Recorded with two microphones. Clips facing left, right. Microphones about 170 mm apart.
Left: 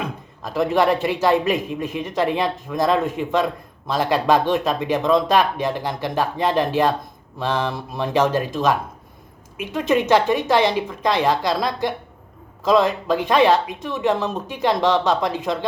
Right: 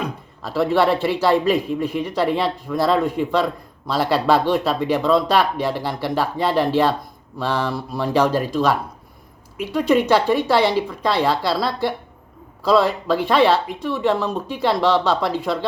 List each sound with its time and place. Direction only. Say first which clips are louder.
0.4 s a man's voice: right 1 dB; 15° left (ahead or behind)